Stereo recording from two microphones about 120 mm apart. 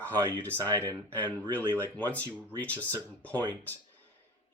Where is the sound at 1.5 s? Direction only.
15° left (ahead or behind).